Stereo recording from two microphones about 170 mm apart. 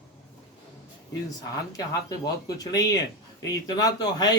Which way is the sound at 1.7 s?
20° left (ahead or behind).